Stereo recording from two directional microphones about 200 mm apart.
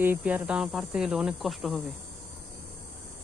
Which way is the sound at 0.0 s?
10° right (ahead or behind).